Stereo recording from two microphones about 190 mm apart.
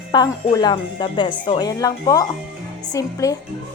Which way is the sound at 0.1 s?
25° left (ahead or behind).